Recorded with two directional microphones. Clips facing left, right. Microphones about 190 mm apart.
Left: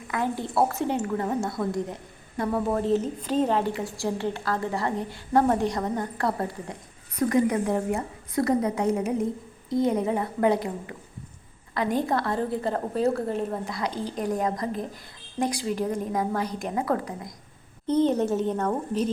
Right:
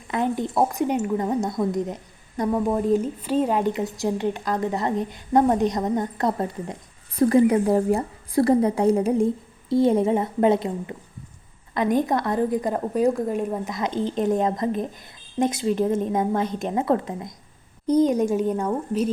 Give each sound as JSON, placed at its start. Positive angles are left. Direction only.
{"t": 0.1, "sound": "a woman's voice", "side_deg": -20}
{"t": 18.0, "sound": "a woman's voice", "side_deg": -10}